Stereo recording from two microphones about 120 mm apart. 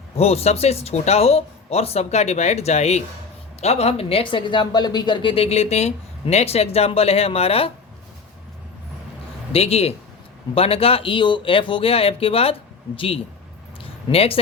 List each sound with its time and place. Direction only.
0.2 s speech: 60° left (ahead or behind)
9.5 s speech: 55° left (ahead or behind)
13.8 s a sound: 55° left (ahead or behind)